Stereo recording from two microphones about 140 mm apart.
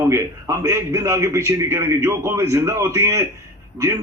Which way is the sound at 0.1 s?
20° right (ahead or behind).